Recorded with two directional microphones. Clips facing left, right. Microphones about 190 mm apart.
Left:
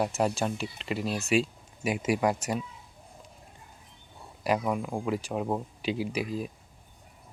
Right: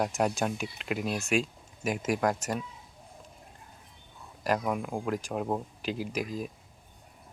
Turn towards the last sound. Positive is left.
turn(degrees=-40)  # may be behind; listen again after turning